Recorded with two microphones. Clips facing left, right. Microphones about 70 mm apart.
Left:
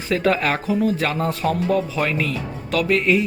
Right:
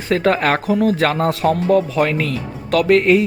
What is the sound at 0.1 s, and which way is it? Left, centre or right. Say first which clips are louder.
Speech: right 4 dB; right.